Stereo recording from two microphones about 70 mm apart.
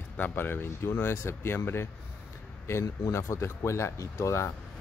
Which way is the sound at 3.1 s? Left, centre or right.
Left.